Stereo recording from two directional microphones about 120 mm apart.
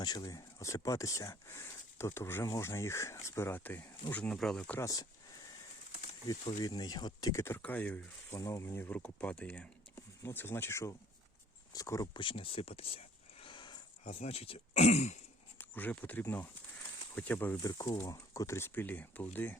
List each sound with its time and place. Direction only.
0.0 s speech: 35° left (ahead or behind); by 4.8 s 10° left (ahead or behind)
4.8 s speech: 30° left (ahead or behind)
6.6 s speech: 35° left (ahead or behind); by 8.4 s 10° left (ahead or behind)
8.4 s speech: 25° left (ahead or behind)
9.9 s speech: 20° left (ahead or behind)
12.1 s speech: 45° left (ahead or behind)
13.4 s a sound: 40° left (ahead or behind)
14.2 s speech: 55° left (ahead or behind)
15.5 s speech: 15° left (ahead or behind)
17.6 s speech: 30° left (ahead or behind); by 19.5 s 15° left (ahead or behind)